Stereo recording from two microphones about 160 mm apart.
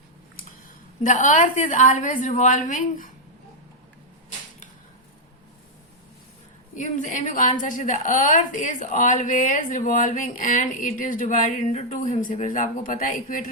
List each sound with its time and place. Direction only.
1.0 s a woman's voice: 50° left (ahead or behind)
6.7 s a woman's voice: 50° left (ahead or behind)